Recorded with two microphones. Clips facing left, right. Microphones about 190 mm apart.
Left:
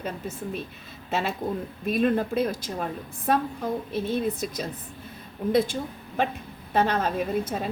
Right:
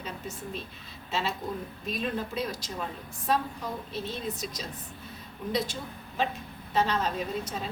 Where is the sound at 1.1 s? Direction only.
55° left (ahead or behind).